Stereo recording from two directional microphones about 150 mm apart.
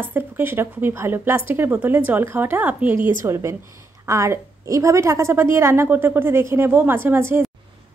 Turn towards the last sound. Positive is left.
turn(degrees=-15)  # may be behind; listen again after turning